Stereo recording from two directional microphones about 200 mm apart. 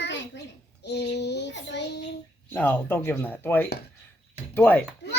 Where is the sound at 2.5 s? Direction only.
10° left (ahead or behind).